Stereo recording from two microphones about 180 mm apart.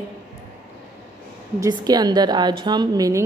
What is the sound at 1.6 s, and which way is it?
A woman's voice, 20° right (ahead or behind).